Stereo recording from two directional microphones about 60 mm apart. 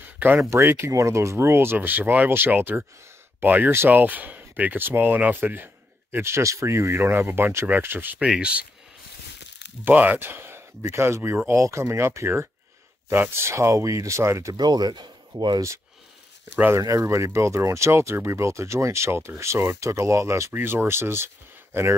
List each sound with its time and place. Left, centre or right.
0.0 s a sound: right
0.4 s speech: right
1.8 s speech: right
6.1 s speech: right
8.2 s speech: centre
9.9 s speech: right
13.1 s speech: right
16.7 s speech: right
20.5 s speech: right